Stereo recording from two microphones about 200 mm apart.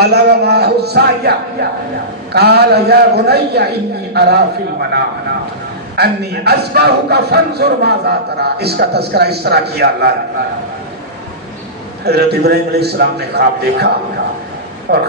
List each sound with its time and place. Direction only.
0.0 s a man's voice: 55° right (ahead or behind)
5.9 s a man's voice: 55° right (ahead or behind)
12.0 s a man's voice: 55° right (ahead or behind)